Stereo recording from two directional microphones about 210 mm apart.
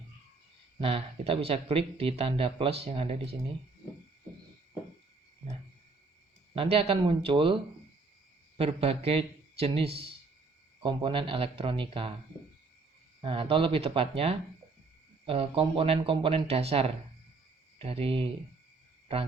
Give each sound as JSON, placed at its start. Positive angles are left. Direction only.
{"t": 0.8, "sound": "speech", "side_deg": -25}
{"t": 6.5, "sound": "speech", "side_deg": -25}
{"t": 13.2, "sound": "speech", "side_deg": -25}